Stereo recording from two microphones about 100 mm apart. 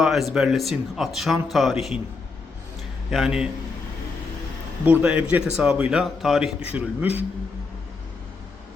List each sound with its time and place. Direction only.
0.0 s speech: centre (ahead or behind)
3.1 s a man's voice: 5° right (ahead or behind)
4.9 s a man's voice: 15° right (ahead or behind)
6.7 s a man's voice: 20° right (ahead or behind)